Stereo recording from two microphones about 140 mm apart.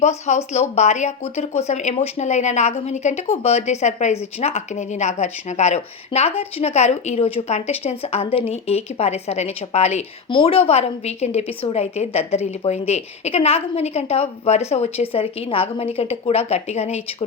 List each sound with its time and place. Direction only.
0.0 s a woman's voice: 55° left (ahead or behind)